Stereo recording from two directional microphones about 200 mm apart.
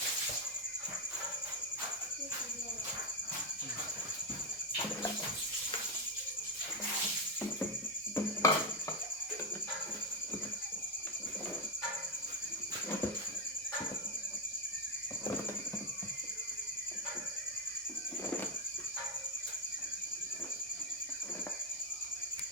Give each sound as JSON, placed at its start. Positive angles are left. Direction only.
{"t": 8.4, "sound": "music", "side_deg": 15}